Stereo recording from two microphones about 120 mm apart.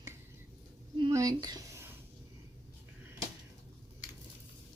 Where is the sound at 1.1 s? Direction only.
30° right (ahead or behind).